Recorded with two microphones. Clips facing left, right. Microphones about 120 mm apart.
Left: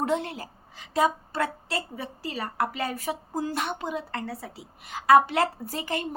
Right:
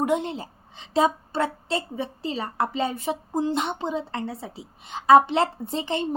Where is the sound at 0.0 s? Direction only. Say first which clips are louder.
Right 3 dB; 15° right (ahead or behind).